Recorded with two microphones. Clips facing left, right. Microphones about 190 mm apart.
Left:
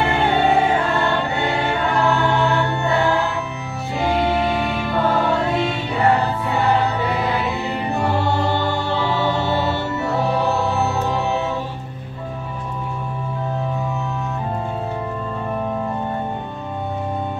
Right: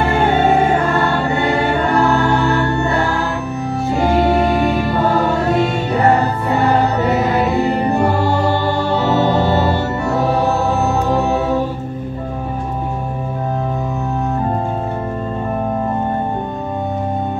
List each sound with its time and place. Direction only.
0.0 s music: 45° right (ahead or behind)